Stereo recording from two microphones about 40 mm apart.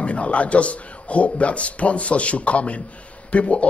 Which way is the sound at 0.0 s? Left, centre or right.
Left.